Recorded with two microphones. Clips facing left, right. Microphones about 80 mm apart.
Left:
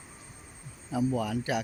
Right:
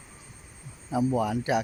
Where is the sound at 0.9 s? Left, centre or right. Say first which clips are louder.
Right 3 dB; right.